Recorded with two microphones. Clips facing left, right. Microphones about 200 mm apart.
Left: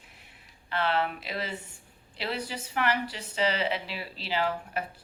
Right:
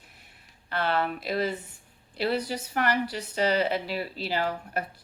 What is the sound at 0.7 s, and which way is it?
A woman's voice, 45° right (ahead or behind).